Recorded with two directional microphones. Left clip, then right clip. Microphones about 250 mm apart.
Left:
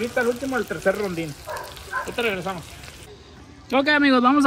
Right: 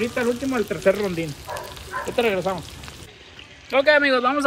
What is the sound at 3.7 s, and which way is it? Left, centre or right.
Speech, centre.